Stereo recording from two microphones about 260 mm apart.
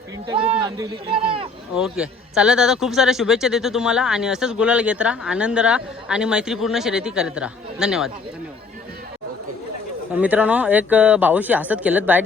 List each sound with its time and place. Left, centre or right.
0.3 s speech: centre
1.7 s a man's voice: centre
10.2 s a man's voice: centre